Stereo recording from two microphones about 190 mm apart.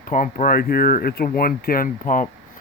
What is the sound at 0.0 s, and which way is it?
Speech, 45° left (ahead or behind).